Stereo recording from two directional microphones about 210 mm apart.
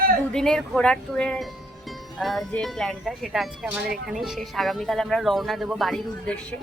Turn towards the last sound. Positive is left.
turn(degrees=0)  # may be behind; listen again after turning